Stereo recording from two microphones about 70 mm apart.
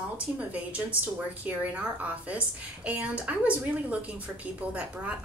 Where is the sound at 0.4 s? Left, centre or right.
Right.